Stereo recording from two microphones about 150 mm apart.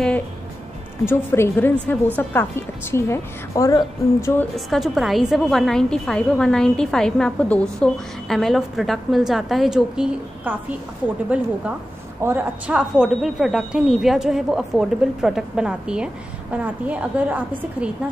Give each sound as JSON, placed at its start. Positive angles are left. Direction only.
{"t": 1.0, "sound": "a woman's voice", "side_deg": 15}
{"t": 4.6, "sound": "a woman's voice", "side_deg": 0}